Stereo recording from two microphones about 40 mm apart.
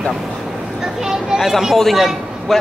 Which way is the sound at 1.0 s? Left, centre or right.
Centre.